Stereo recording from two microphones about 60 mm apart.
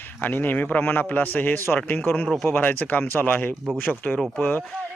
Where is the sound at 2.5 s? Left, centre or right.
Left.